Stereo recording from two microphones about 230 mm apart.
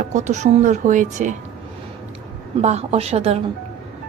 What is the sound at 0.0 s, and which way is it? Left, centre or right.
Speech, right.